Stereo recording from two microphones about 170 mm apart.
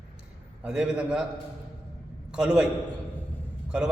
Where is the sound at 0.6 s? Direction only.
5° right (ahead or behind).